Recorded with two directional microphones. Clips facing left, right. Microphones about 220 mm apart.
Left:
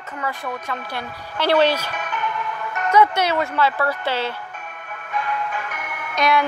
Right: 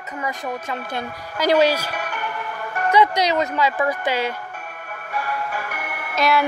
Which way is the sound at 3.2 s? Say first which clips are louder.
Even; 15° right (ahead or behind).